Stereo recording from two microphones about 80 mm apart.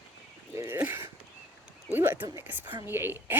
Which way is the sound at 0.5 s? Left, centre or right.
Right.